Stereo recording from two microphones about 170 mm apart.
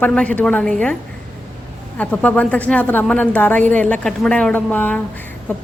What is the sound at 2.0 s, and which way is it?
A woman's voice, 10° left (ahead or behind).